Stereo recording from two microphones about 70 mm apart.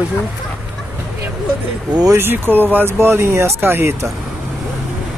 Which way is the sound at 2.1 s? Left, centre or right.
Right.